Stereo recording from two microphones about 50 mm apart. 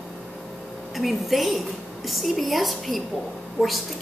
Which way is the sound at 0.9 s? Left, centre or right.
Centre.